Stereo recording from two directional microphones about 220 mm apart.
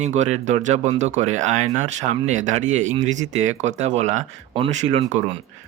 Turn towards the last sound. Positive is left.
turn(degrees=-30)  # may be behind; listen again after turning